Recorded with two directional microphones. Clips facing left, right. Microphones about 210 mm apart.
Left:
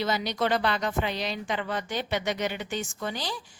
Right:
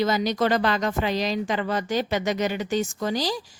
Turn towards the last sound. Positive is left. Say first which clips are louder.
# right 8 dB
turn(degrees=-40)  # may be behind; listen again after turning